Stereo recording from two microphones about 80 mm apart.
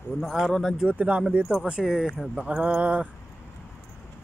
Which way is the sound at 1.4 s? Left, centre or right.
Centre.